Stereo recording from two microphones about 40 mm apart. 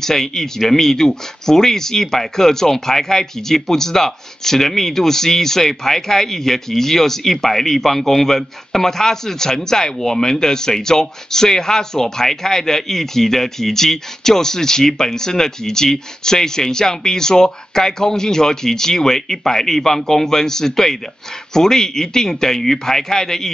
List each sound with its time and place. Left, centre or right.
0.0 s speech: centre